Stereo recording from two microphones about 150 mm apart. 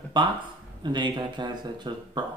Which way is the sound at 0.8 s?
30° right (ahead or behind).